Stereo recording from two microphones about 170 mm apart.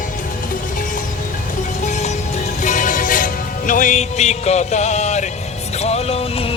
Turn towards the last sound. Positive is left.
turn(degrees=40)  # may be behind; listen again after turning